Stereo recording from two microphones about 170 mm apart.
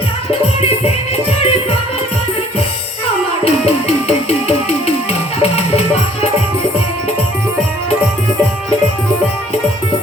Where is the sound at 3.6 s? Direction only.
35° left (ahead or behind).